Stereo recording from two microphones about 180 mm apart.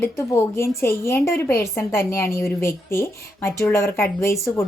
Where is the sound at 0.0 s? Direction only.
15° left (ahead or behind).